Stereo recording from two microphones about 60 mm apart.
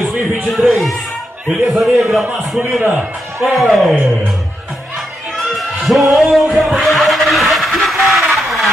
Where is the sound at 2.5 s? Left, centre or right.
Right.